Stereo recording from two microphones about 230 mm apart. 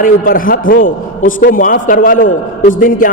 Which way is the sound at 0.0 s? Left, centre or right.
Left.